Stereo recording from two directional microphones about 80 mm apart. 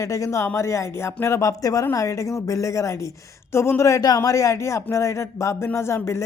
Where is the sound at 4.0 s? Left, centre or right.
Left.